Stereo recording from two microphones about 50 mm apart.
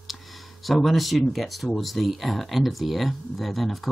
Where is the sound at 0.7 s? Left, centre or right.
Centre.